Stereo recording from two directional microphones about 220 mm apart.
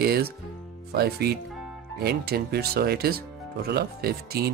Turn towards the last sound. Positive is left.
turn(degrees=-45)  # may be behind; listen again after turning